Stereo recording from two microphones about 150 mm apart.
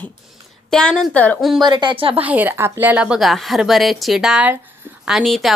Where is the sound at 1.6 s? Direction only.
30° right (ahead or behind).